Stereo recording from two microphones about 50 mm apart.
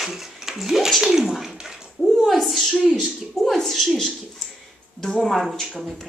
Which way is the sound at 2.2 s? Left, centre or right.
Centre.